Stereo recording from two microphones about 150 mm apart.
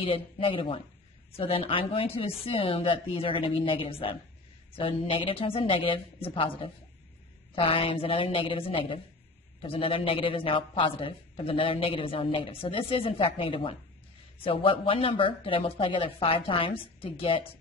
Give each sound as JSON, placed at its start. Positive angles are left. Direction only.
{"t": 0.0, "sound": "a woman's voice", "side_deg": 35}